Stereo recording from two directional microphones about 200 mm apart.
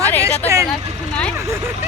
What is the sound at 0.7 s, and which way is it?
Speech, 5° left (ahead or behind).